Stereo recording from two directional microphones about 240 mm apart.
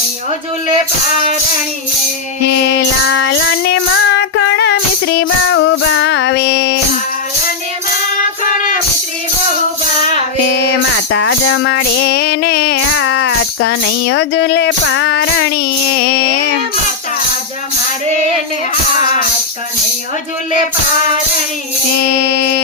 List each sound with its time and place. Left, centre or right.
2.7 s child singing: left
10.9 s music: left
22.1 s music: left